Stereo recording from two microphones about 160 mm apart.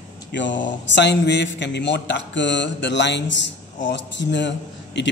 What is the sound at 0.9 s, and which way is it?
Speech, 90° left.